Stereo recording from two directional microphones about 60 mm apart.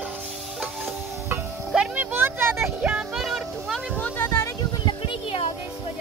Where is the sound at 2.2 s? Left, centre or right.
Right.